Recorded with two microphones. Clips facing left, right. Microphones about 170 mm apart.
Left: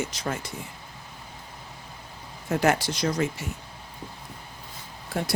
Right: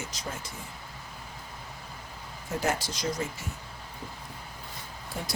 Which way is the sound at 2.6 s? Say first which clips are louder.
Left 6 dB; 70° left (ahead or behind).